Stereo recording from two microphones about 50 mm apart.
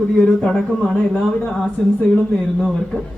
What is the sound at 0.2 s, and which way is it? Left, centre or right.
Speech, centre.